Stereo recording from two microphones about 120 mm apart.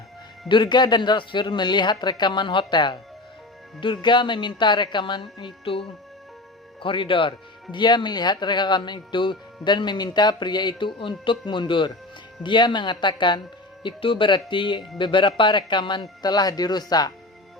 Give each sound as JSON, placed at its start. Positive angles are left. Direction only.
{"t": 0.4, "sound": "speech", "side_deg": 40}
{"t": 5.7, "sound": "speech", "side_deg": 50}
{"t": 6.8, "sound": "speech", "side_deg": 45}